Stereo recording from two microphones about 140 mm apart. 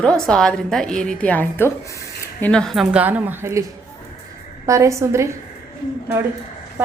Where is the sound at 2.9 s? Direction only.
10° right (ahead or behind).